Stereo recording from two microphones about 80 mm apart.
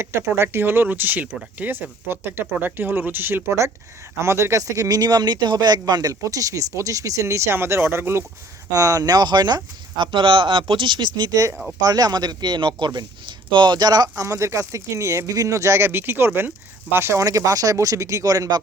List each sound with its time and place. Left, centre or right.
0.0 s speech: right
8.7 s speech: right
10.0 s speech: right
14.2 s speech: right
17.2 s speech: right